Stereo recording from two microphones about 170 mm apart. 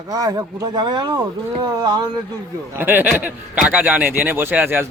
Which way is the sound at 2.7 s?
10° right (ahead or behind).